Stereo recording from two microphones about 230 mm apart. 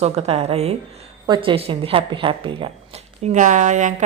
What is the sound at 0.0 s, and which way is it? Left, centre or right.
Speech, right.